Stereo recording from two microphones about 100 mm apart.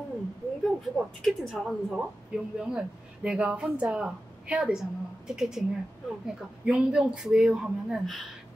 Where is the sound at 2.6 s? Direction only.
5° right (ahead or behind).